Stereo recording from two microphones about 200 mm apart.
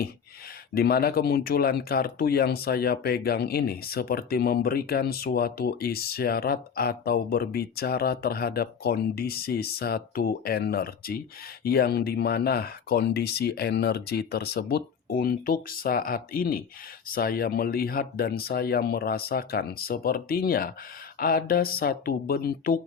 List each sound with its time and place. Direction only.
0.7 s speech: 50° left (ahead or behind)